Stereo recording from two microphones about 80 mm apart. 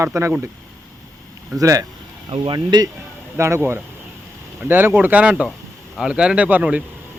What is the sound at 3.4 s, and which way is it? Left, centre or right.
Speech, right.